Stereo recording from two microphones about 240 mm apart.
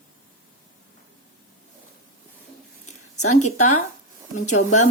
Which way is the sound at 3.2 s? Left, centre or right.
Left.